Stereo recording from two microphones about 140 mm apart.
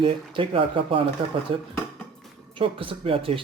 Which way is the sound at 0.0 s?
40° right (ahead or behind).